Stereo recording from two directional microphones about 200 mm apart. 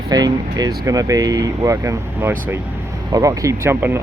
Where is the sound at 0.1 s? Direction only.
20° right (ahead or behind).